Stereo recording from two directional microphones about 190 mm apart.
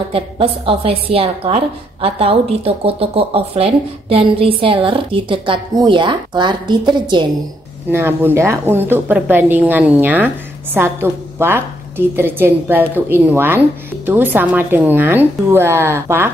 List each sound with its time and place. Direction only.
0.1 s a woman's voice: 30° right (ahead or behind)
7.9 s a woman's voice: 10° right (ahead or behind)